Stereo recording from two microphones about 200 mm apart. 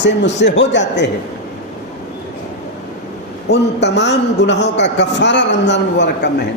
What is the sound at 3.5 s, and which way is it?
A man's voice, 60° left (ahead or behind).